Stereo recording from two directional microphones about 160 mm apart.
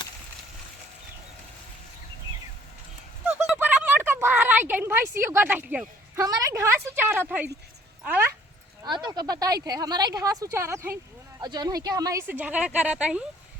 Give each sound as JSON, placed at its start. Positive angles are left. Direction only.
{"t": 3.2, "sound": "a sound", "side_deg": -10}
{"t": 8.0, "sound": "speech", "side_deg": -10}
{"t": 8.8, "sound": "speech", "side_deg": -25}
{"t": 12.3, "sound": "a woman's voice", "side_deg": -10}